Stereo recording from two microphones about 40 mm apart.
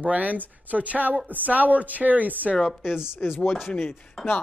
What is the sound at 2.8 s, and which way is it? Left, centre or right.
Speech, centre.